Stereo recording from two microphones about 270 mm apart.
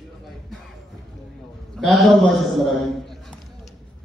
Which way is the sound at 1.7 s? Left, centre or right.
Centre.